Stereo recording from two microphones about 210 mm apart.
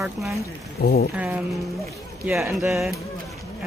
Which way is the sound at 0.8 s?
45° left (ahead or behind).